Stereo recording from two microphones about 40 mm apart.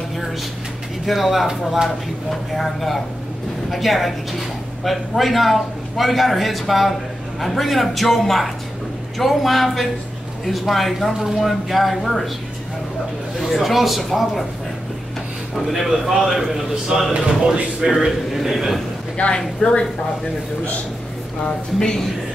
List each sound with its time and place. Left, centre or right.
1.0 s a man's voice: centre
13.4 s a man's voice: centre
15.5 s a man's voice: centre
16.9 s a man's voice: centre
19.1 s speech: left
21.7 s speech: centre